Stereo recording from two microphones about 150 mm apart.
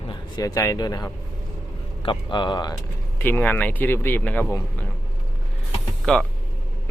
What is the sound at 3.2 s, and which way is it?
Speech, 10° left (ahead or behind).